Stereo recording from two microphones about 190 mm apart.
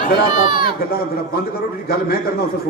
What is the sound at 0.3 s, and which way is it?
Speech, 50° left (ahead or behind).